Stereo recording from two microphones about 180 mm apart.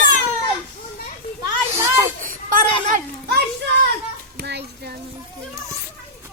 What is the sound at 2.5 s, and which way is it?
Children playing, 50° right (ahead or behind).